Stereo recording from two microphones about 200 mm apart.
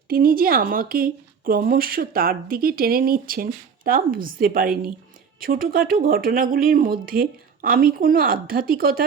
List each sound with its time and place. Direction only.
0.1 s speech: 45° right (ahead or behind)